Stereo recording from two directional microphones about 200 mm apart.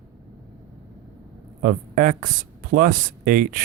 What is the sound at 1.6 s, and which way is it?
Speech, 45° right (ahead or behind).